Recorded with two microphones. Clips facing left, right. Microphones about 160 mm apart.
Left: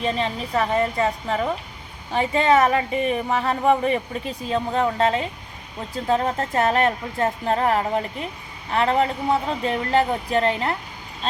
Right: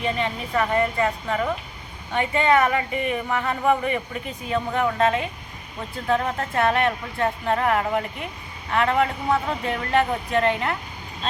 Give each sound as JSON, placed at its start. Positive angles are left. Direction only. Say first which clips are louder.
{"t": 0.0, "sound": "a woman's voice", "louder": "left 1 dB", "side_deg": 30}